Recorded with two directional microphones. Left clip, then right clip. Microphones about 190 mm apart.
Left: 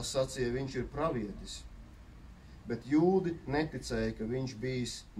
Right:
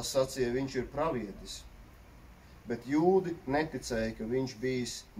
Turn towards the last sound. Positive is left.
turn(degrees=25)  # may be behind; listen again after turning